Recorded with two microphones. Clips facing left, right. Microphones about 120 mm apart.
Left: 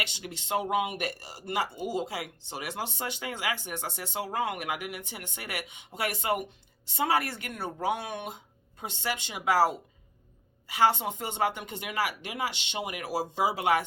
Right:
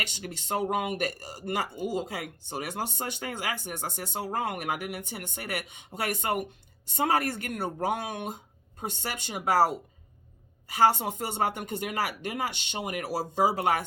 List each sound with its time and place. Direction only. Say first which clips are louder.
0.0 s speech: even; 45° right (ahead or behind)